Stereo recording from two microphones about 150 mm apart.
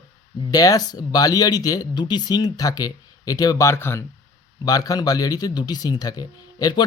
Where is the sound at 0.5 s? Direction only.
25° left (ahead or behind).